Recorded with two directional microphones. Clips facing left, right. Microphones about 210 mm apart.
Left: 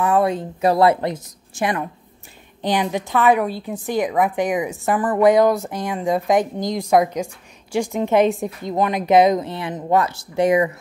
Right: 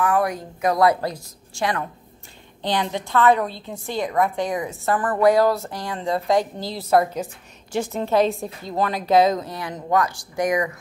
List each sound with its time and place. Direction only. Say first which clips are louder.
0.0 s a woman's voice: left 3 dB; 25° left (ahead or behind)